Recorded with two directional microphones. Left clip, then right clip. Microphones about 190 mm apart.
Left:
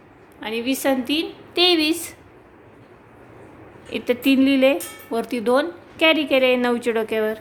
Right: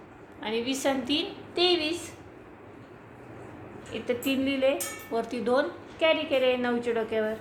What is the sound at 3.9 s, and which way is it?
A woman's voice, 60° left (ahead or behind).